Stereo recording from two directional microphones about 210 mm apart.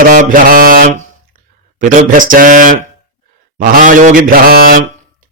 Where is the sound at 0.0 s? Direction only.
40° right (ahead or behind).